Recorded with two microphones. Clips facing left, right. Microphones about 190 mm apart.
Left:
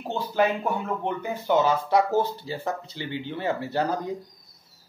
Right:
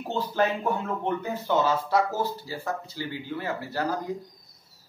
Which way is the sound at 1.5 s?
20° left (ahead or behind).